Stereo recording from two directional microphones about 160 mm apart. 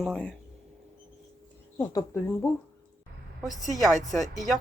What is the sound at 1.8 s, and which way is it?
Speech, 20° left (ahead or behind).